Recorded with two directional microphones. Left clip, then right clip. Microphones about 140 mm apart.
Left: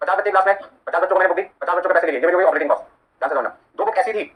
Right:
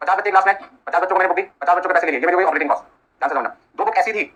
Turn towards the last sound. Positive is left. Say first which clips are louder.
# right 1 dB
turn(degrees=-40)  # may be behind; listen again after turning